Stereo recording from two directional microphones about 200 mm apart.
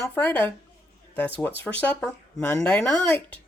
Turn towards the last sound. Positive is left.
turn(degrees=10)  # may be behind; listen again after turning